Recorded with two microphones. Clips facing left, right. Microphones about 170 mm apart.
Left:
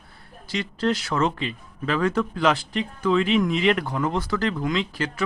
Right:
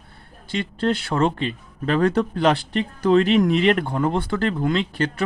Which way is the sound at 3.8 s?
30° right (ahead or behind).